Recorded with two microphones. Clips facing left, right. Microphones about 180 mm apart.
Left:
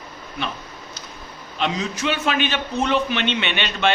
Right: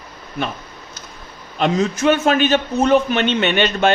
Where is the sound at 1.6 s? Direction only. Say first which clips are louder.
Right 7 dB; 50° right (ahead or behind).